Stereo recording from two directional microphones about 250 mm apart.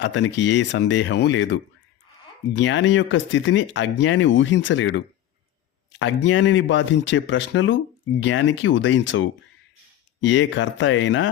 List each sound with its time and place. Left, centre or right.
0.0 s speech: left